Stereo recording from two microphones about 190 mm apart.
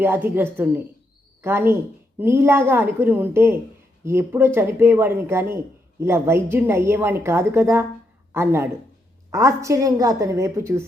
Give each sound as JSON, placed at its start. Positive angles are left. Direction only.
{"t": 0.0, "sound": "a woman's voice", "side_deg": -10}